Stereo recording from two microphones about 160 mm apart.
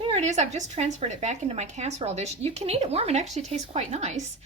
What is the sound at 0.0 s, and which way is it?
Speech, 45° right (ahead or behind).